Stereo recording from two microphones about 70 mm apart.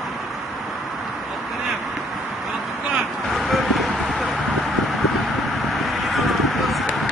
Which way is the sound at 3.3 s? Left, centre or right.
Centre.